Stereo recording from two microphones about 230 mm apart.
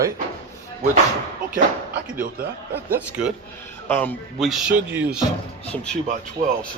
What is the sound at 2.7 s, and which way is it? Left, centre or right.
Speech, centre.